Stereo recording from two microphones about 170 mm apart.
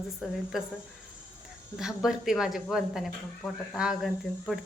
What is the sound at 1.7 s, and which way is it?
Speech, 5° right (ahead or behind).